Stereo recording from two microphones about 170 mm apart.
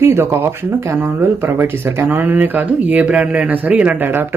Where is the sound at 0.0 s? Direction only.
15° right (ahead or behind).